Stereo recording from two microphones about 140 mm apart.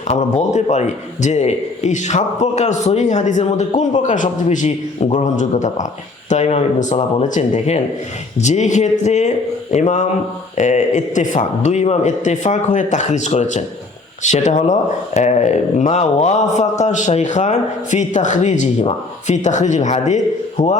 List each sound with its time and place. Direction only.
0.1 s speech: 55° left (ahead or behind)